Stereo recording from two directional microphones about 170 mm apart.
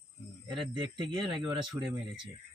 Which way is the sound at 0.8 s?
25° right (ahead or behind).